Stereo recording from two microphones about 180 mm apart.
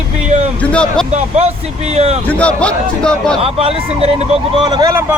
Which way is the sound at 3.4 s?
30° right (ahead or behind).